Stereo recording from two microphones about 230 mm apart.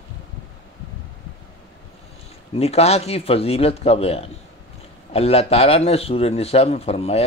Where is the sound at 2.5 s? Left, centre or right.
Left.